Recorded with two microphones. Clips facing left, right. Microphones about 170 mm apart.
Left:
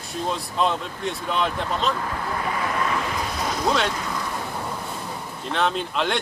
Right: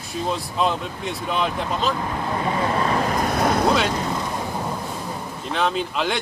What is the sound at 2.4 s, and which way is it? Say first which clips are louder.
Vehicle: right 4 dB; 30° right (ahead or behind).